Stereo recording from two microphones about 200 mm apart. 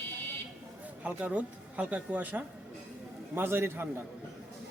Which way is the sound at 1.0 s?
5° right (ahead or behind).